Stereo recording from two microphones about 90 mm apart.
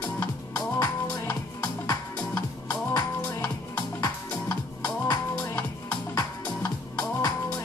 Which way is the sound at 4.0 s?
45° left (ahead or behind).